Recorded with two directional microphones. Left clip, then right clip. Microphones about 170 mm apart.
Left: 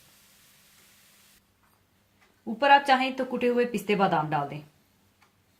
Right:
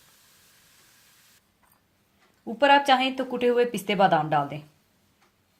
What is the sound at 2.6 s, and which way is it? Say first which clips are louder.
Speech: right 1 dB; 45° right (ahead or behind).